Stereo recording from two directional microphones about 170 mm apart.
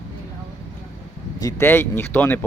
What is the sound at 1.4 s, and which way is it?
Speech, 15° left (ahead or behind).